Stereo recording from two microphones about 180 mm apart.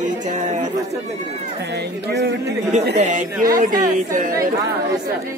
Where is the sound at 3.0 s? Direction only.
45° right (ahead or behind).